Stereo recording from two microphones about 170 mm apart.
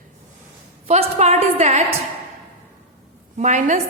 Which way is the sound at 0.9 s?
40° right (ahead or behind).